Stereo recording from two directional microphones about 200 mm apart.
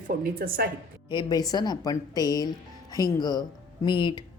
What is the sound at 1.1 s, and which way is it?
A woman's voice, 20° left (ahead or behind).